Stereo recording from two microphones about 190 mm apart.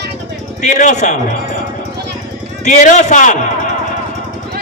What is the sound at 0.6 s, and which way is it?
Speech, 40° left (ahead or behind).